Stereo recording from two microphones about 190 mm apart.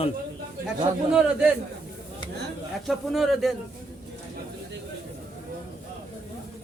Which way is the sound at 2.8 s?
Centre (ahead or behind).